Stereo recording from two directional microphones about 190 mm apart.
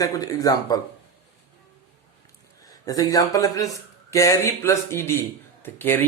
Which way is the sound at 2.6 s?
20° left (ahead or behind).